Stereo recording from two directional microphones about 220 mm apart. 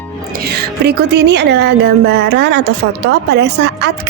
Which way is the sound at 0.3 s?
45° right (ahead or behind).